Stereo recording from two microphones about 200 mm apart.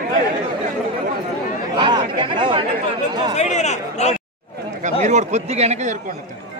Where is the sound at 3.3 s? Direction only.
35° left (ahead or behind).